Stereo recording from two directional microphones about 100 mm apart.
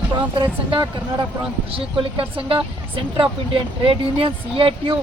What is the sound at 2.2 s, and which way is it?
Speech, 65° right (ahead or behind).